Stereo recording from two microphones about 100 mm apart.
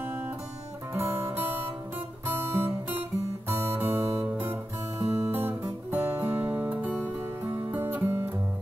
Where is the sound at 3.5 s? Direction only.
25° right (ahead or behind).